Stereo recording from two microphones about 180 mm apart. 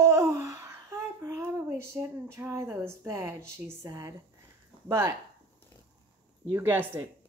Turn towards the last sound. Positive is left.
turn(degrees=-10)  # may be behind; listen again after turning